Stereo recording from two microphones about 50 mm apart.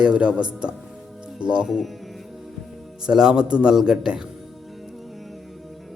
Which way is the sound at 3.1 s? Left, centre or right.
Centre.